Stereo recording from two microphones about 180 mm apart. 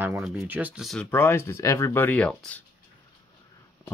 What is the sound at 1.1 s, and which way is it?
Speech, 10° left (ahead or behind).